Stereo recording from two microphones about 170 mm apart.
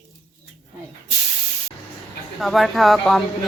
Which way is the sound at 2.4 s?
Centre (ahead or behind).